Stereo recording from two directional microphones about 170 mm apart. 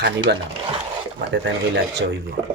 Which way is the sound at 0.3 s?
90° right.